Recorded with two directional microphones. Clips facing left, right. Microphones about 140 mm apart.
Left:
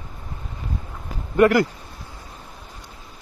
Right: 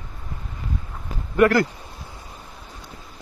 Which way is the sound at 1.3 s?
20° left (ahead or behind).